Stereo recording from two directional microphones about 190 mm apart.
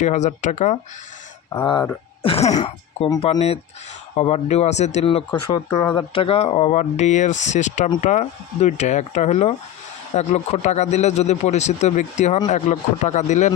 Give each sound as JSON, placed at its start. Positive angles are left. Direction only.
{"t": 0.0, "sound": "speech", "side_deg": 40}
{"t": 1.5, "sound": "speech", "side_deg": 20}
{"t": 5.3, "sound": "speech", "side_deg": 15}